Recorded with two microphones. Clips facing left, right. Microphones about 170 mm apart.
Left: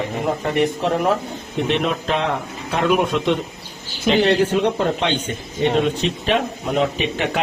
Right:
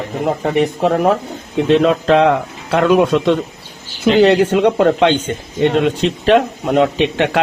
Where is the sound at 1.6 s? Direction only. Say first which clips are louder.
Right 8 dB; 90° right.